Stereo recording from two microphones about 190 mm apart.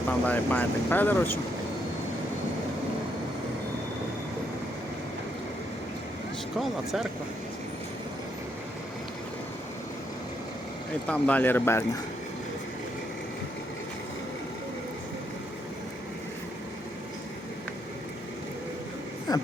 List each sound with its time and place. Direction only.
0.3 s speech: 10° left (ahead or behind)
6.6 s speech: centre (ahead or behind)
11.0 s speech: 5° left (ahead or behind)
19.3 s a sound: 20° left (ahead or behind)